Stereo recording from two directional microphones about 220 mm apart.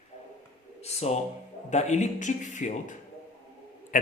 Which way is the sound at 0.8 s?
30° left (ahead or behind).